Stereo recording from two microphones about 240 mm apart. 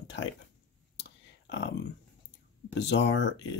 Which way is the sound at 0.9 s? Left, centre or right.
Left.